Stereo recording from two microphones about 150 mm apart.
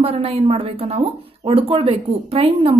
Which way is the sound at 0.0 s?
40° right (ahead or behind).